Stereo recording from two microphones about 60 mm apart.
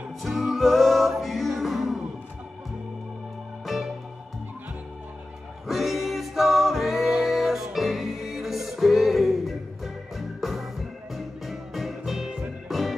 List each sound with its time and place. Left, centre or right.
0.2 s music: centre
3.6 s music: centre
5.7 s music: centre